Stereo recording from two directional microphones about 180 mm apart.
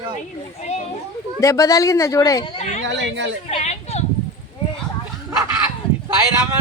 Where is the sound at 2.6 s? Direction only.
40° left (ahead or behind).